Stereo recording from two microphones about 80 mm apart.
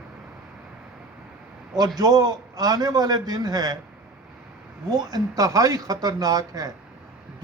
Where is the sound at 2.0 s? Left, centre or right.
Right.